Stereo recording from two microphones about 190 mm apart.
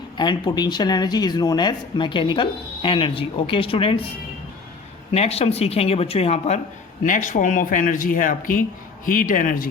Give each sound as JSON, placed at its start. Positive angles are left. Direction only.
{"t": 0.2, "sound": "speech", "side_deg": 25}
{"t": 5.1, "sound": "speech", "side_deg": 35}